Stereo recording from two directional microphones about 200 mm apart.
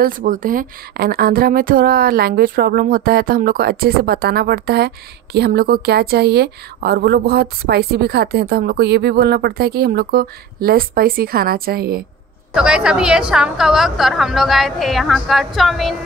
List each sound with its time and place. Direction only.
0.0 s a woman's voice: 40° right (ahead or behind)
12.5 s a woman's voice: 5° right (ahead or behind)